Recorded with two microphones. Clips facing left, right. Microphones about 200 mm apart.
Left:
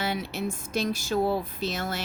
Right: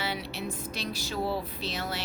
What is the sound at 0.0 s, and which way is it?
A woman's voice, 45° left (ahead or behind).